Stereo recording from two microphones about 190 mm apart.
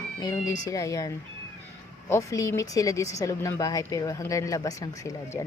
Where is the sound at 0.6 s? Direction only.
15° left (ahead or behind).